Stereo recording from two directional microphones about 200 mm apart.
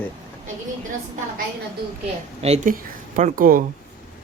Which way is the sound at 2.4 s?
35° right (ahead or behind).